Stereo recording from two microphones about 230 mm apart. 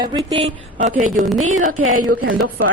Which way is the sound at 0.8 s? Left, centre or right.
Right.